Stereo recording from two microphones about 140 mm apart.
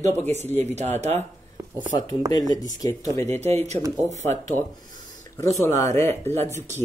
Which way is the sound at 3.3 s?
50° right (ahead or behind).